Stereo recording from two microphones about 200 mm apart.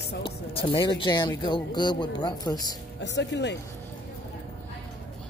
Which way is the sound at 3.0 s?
60° left (ahead or behind).